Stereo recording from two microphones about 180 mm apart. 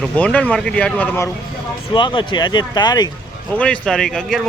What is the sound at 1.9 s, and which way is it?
Speech, 25° left (ahead or behind).